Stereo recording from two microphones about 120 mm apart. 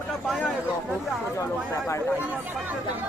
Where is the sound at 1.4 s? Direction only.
25° left (ahead or behind).